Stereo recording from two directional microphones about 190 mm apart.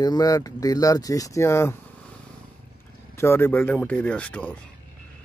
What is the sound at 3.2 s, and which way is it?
Speech, 10° left (ahead or behind).